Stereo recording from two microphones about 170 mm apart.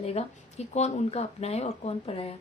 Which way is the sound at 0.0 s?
35° left (ahead or behind).